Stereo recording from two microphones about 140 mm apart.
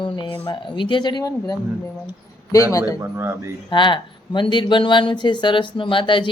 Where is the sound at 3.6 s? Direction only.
35° left (ahead or behind).